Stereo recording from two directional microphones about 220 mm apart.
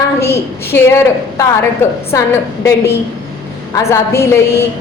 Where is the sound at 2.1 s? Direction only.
15° left (ahead or behind).